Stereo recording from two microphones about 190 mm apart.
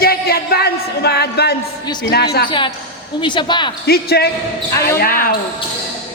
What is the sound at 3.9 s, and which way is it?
Speech, 55° left (ahead or behind).